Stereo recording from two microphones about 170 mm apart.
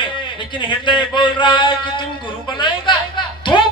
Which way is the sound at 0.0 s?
30° left (ahead or behind).